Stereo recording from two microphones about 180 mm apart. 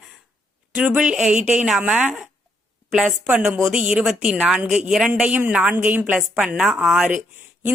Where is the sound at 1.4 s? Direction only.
40° right (ahead or behind).